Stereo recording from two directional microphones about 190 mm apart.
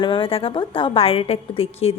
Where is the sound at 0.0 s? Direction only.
25° left (ahead or behind).